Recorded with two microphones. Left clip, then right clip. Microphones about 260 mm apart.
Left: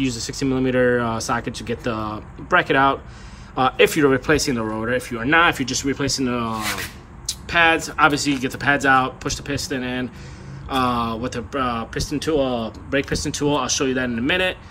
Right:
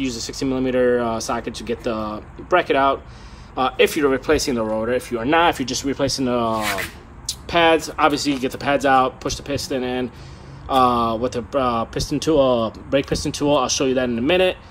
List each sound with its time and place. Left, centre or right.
0.0 s speech: centre